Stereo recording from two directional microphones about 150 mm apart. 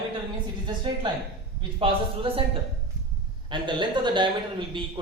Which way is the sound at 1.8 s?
40° right (ahead or behind).